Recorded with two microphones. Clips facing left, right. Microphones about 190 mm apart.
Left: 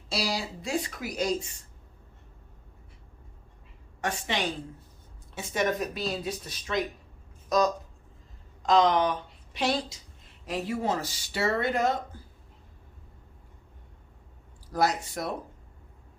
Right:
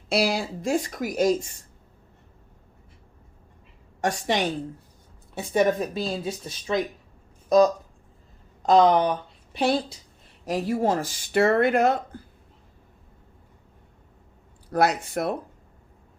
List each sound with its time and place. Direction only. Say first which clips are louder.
0.1 s speech: right 7 dB; 60° right (ahead or behind)
4.0 s a woman's voice: right 6 dB; 40° right (ahead or behind)
8.7 s speech: right 5 dB; 40° right (ahead or behind); by 12.2 s 60° right (ahead or behind)
14.7 s speech: right 4 dB; 65° right (ahead or behind)